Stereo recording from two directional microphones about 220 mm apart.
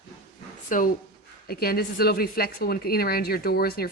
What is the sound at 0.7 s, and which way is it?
A woman's voice, 35° left (ahead or behind).